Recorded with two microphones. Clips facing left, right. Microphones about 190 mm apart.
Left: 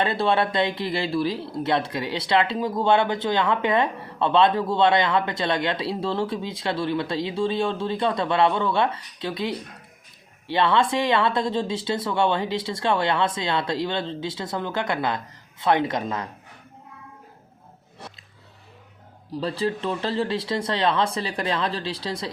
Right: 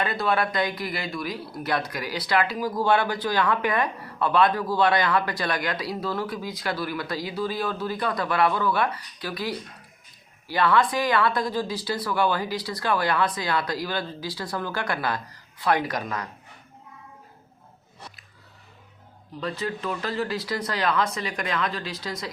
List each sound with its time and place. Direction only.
0.0 s speech: 30° left (ahead or behind)
19.3 s speech: 30° left (ahead or behind)